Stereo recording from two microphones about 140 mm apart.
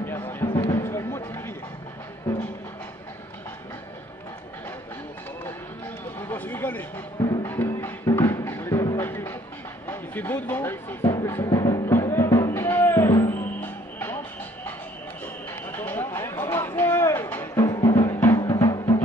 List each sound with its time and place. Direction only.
0.0 s music: 15° left (ahead or behind)
6.2 s a sound: 15° left (ahead or behind)
7.2 s music: 30° left (ahead or behind)
7.5 s music: 15° left (ahead or behind)
9.8 s speech: 15° left (ahead or behind)
11.2 s music: 20° left (ahead or behind)
15.7 s a sound: 15° left (ahead or behind)
17.6 s music: 30° left (ahead or behind)